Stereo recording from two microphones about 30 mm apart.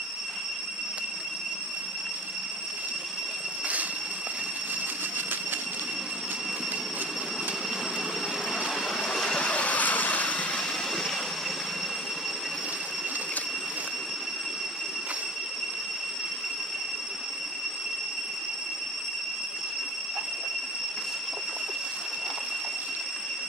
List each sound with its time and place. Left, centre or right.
8.9 s vehicle: left
9.4 s train: left
9.8 s vehicle: left